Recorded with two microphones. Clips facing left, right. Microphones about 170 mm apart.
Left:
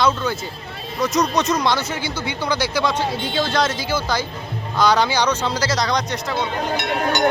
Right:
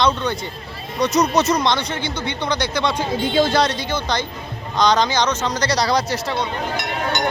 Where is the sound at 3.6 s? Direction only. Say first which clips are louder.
Right 1 dB; 5° left (ahead or behind).